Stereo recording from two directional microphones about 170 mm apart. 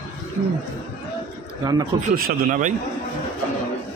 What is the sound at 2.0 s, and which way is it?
Speech, 55° right (ahead or behind).